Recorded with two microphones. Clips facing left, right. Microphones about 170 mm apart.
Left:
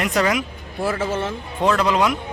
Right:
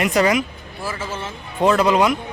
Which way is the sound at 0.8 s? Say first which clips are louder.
Left 6 dB; 60° left (ahead or behind).